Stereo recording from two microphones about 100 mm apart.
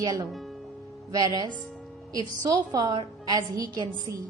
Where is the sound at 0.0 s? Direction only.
40° right (ahead or behind).